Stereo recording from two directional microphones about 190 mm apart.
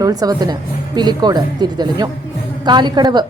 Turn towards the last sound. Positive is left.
turn(degrees=-20)  # may be behind; listen again after turning